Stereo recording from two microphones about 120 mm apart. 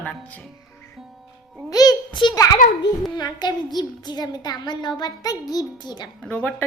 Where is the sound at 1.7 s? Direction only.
35° left (ahead or behind).